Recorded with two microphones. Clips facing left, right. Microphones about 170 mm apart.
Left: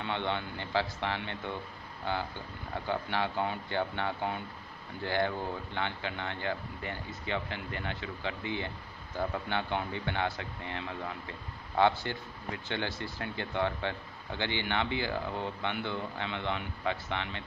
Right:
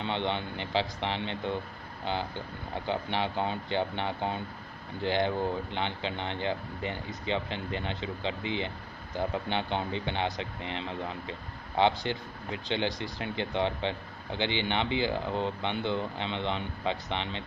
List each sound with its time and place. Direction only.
0.0 s speech: 20° right (ahead or behind)
2.7 s speech: 20° right (ahead or behind)